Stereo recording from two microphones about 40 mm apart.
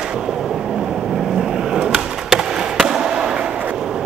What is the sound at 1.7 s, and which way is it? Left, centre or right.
Skateboard, centre.